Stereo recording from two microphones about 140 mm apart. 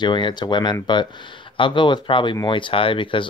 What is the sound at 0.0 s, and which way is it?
Speech, 35° left (ahead or behind).